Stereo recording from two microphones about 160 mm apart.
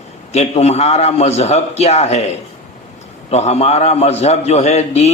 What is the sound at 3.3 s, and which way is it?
A man's voice, 40° left (ahead or behind).